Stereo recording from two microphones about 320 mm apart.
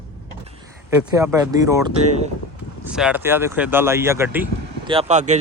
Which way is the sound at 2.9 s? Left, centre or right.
Centre.